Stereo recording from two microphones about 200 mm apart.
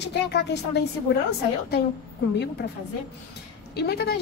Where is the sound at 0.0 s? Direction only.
55° left (ahead or behind).